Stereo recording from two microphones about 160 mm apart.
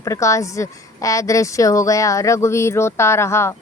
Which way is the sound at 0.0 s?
20° left (ahead or behind).